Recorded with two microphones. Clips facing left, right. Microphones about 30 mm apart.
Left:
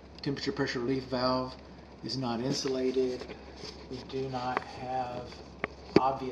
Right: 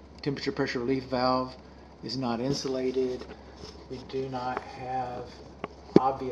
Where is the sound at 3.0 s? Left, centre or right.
Left.